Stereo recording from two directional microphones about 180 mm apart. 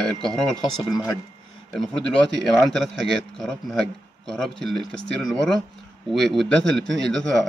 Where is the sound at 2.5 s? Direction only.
Centre (ahead or behind).